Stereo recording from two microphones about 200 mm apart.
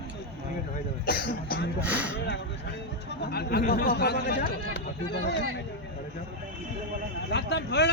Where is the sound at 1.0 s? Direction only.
45° left (ahead or behind).